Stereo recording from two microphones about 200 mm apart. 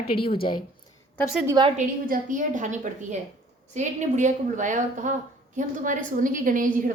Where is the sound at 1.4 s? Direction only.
20° right (ahead or behind).